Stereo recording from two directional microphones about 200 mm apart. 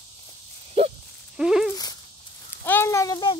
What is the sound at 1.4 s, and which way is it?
Speech, 5° right (ahead or behind).